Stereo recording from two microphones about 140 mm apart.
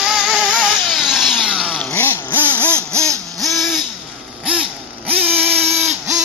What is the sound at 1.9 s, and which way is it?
Vehicle, 15° left (ahead or behind).